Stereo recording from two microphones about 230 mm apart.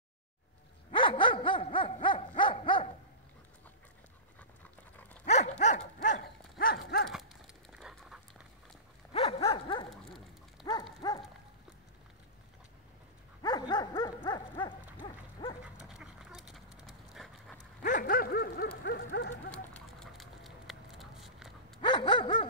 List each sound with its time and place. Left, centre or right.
0.9 s dog: left
5.2 s dog: left
7.7 s a sound: centre
9.1 s dog: left
9.8 s dog: centre
10.6 s dog: centre
13.4 s dog: centre
15.6 s dog: centre
17.8 s dog: left
19.5 s a sound: centre
21.8 s dog: centre